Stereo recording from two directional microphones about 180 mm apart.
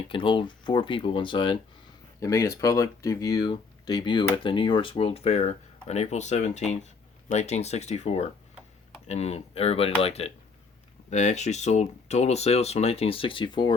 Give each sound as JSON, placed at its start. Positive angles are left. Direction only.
{"t": 0.1, "sound": "speech", "side_deg": 30}
{"t": 2.2, "sound": "speech", "side_deg": 15}